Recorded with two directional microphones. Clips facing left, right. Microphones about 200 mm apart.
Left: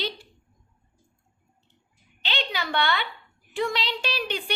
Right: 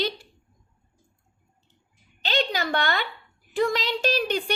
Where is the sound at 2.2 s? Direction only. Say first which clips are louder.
Right 5 dB; 40° right (ahead or behind).